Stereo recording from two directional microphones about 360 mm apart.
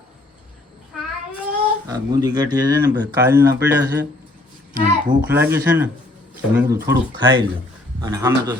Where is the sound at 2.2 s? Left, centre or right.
Centre.